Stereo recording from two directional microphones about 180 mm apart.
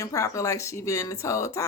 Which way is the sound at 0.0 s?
20° left (ahead or behind).